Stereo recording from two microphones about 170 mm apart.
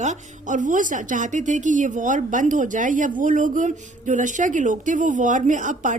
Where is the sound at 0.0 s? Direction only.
45° right (ahead or behind).